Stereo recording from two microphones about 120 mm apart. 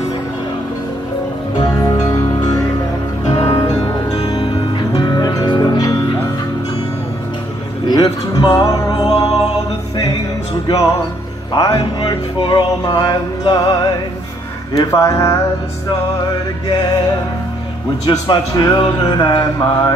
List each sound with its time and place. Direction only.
1.5 s music: 35° left (ahead or behind)
4.9 s music: 35° left (ahead or behind)
7.9 s music: 30° left (ahead or behind)
10.7 s speech: 30° left (ahead or behind)
11.5 s music: 35° left (ahead or behind)
14.7 s speech: 30° left (ahead or behind)
18.0 s music: 35° left (ahead or behind)